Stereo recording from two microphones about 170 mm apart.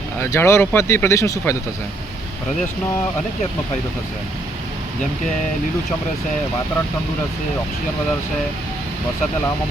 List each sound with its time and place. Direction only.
0.2 s speech: 15° left (ahead or behind)